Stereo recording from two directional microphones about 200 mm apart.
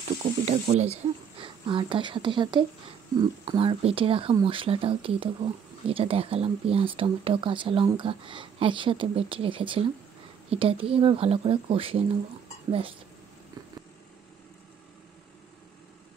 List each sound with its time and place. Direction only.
0.2 s speech: 30° right (ahead or behind)